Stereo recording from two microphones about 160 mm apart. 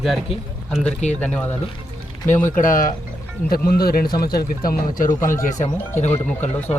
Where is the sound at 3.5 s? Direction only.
70° left (ahead or behind).